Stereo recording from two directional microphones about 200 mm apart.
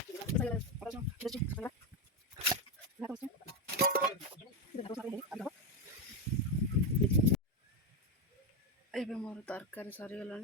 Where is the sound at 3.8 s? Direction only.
50° right (ahead or behind).